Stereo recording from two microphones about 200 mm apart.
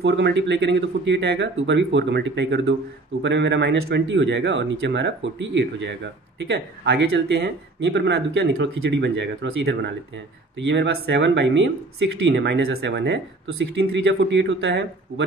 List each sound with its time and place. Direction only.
0.0 s speech: 60° right (ahead or behind)